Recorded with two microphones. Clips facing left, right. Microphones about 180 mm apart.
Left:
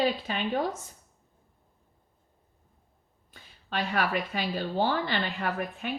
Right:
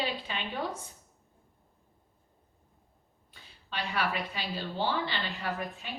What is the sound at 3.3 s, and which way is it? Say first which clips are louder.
A woman's voice: left 6 dB; 50° left (ahead or behind).